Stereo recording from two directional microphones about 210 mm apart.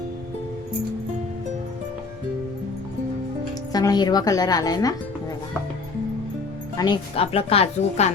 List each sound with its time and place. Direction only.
3.7 s a woman's voice: 20° left (ahead or behind)
6.7 s speech: 20° left (ahead or behind)